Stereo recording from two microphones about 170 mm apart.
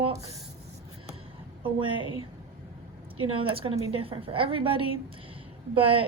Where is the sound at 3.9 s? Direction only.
35° right (ahead or behind).